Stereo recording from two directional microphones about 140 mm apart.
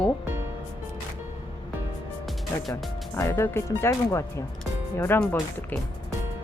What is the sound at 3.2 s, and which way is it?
Speech, 20° left (ahead or behind).